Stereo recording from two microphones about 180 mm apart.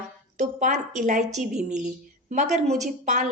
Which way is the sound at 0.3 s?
45° right (ahead or behind).